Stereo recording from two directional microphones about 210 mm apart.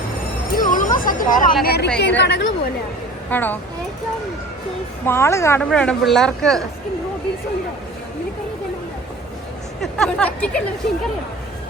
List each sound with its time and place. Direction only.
0.5 s a sound: 40° left (ahead or behind)
1.6 s speech: 50° left (ahead or behind)
3.2 s speech: 10° left (ahead or behind)
5.0 s speech: 10° left (ahead or behind)
9.8 s speech: 5° left (ahead or behind)